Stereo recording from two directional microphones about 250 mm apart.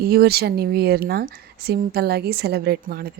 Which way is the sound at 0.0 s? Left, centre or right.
Right.